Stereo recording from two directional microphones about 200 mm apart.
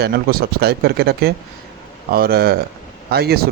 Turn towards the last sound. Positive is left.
turn(degrees=-50)  # may be behind; listen again after turning